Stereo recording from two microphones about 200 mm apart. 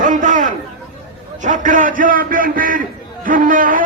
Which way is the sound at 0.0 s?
40° right (ahead or behind).